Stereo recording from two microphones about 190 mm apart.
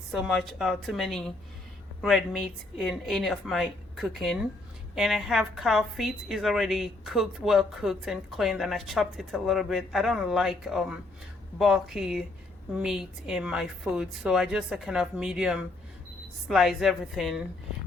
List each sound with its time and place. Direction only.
0.1 s a woman's voice: centre (ahead or behind)